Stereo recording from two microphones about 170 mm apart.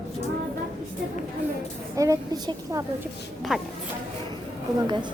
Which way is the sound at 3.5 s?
5° right (ahead or behind).